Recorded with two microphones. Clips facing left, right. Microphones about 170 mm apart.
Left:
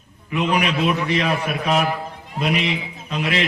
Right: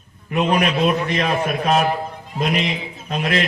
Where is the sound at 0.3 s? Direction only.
45° right (ahead or behind).